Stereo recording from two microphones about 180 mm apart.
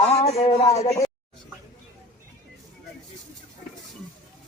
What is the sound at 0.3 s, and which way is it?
Speech, 30° left (ahead or behind).